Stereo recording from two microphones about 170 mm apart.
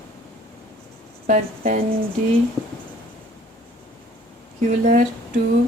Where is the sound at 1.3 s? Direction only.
45° right (ahead or behind).